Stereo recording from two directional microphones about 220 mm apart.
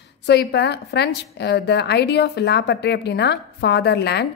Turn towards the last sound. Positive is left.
turn(degrees=50)  # may be behind; listen again after turning